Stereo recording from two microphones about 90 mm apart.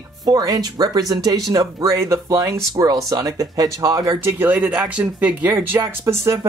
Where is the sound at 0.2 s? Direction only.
40° right (ahead or behind).